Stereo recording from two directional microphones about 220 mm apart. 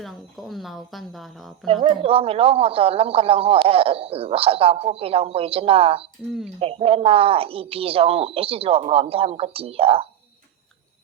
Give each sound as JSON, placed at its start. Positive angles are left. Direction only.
{"t": 0.0, "sound": "speech", "side_deg": 0}
{"t": 1.6, "sound": "speech", "side_deg": -25}